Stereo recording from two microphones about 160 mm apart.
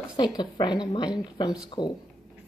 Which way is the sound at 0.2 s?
30° left (ahead or behind).